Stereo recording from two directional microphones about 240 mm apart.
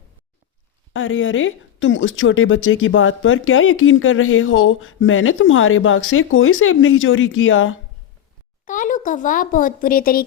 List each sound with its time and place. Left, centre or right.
0.9 s a woman's voice: left
8.6 s speech: left